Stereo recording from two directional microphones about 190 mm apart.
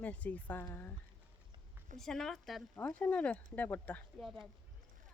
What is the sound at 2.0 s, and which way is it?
A woman's voice, centre (ahead or behind).